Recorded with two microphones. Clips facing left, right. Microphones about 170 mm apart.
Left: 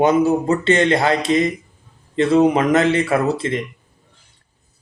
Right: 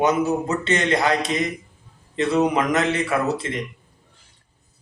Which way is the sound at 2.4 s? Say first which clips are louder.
Left 5 dB; 30° left (ahead or behind).